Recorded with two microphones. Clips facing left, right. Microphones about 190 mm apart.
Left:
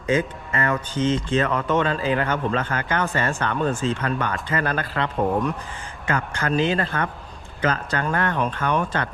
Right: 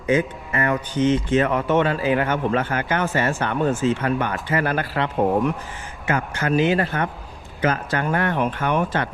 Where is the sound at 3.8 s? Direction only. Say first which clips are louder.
Right 3 dB; 15° right (ahead or behind).